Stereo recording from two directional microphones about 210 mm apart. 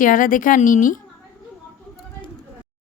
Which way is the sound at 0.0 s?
40° left (ahead or behind).